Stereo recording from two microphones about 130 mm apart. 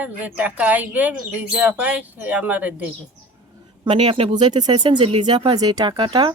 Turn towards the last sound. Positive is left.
turn(degrees=-40)  # may be behind; listen again after turning